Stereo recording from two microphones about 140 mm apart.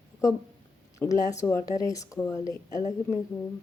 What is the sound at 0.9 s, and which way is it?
A woman's voice, 20° left (ahead or behind).